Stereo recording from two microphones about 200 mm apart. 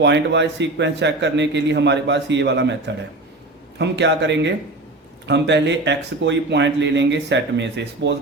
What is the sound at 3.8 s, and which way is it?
Speech, 60° right (ahead or behind).